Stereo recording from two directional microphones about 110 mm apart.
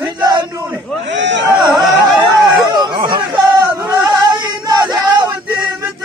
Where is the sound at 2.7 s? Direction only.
40° right (ahead or behind).